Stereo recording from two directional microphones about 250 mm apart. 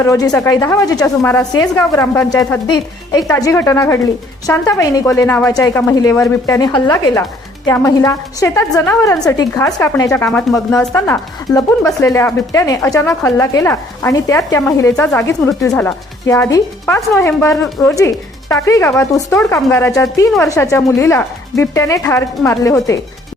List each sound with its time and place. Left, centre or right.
0.0 s a woman's voice: centre